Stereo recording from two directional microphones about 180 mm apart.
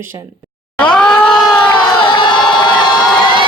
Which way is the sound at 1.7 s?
25° left (ahead or behind).